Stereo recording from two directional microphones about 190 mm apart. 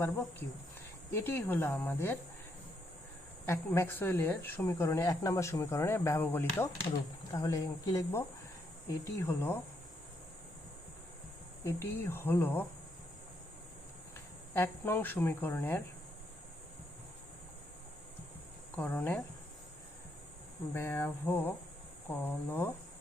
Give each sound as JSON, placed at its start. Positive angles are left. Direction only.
{"t": 0.0, "sound": "speech", "side_deg": 15}
{"t": 3.4, "sound": "speech", "side_deg": 15}
{"t": 11.6, "sound": "speech", "side_deg": 15}
{"t": 14.5, "sound": "speech", "side_deg": 15}
{"t": 18.8, "sound": "speech", "side_deg": 10}
{"t": 20.7, "sound": "speech", "side_deg": 15}